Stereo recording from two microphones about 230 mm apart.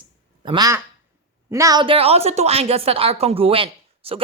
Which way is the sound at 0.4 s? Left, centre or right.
Centre.